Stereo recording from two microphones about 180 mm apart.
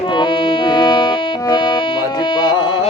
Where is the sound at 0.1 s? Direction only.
25° left (ahead or behind).